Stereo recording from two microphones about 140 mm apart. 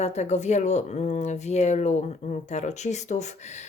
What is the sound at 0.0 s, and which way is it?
Speech, 50° left (ahead or behind).